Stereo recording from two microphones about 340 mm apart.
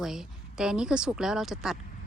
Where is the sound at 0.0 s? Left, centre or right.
Centre.